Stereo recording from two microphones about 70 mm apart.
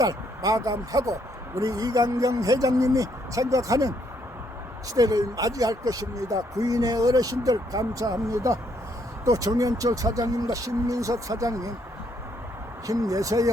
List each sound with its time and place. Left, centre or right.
0.0 s speech: right
4.9 s speech: right
12.9 s speech: right